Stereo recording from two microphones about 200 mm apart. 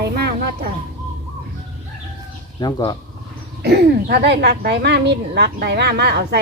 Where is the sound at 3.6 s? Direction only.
55° right (ahead or behind).